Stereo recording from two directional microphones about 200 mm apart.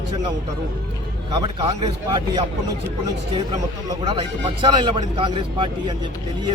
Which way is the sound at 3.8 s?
25° right (ahead or behind).